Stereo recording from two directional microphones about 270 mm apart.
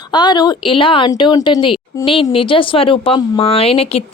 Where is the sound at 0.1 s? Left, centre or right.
Centre.